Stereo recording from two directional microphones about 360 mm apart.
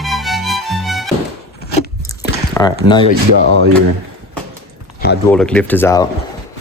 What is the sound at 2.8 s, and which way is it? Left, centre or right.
Speech, centre.